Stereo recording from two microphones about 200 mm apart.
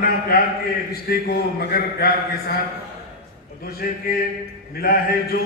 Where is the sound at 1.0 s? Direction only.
50° left (ahead or behind).